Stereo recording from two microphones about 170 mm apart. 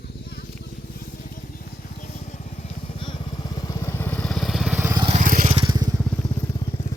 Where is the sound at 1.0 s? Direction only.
55° left (ahead or behind); by 4.9 s 5° right (ahead or behind).